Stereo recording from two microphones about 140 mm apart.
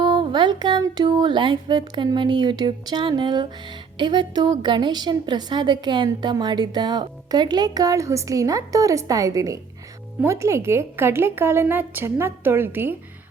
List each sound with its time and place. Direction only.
0.0 s a woman's voice: 35° right (ahead or behind); by 13.0 s 15° right (ahead or behind)